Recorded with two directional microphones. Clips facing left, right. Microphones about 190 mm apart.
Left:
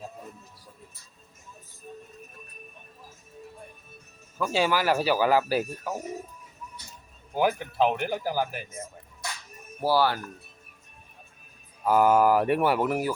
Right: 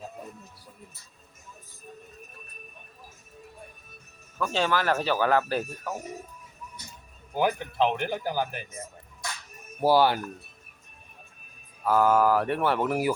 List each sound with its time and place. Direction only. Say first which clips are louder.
4.4 s speech: left 1 dB; 10° left (ahead or behind)
7.3 s speech: left 1 dB; 5° left (ahead or behind)
9.8 s speech: right 3 dB; 20° right (ahead or behind)
11.8 s speech: left 1 dB; 15° left (ahead or behind)